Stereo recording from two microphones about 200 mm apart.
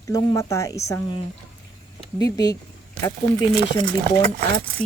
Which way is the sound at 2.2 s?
20° left (ahead or behind).